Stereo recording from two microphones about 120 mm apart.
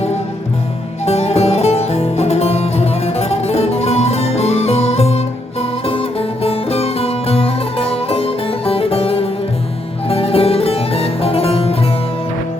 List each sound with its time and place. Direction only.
1.0 s music: 60° left (ahead or behind)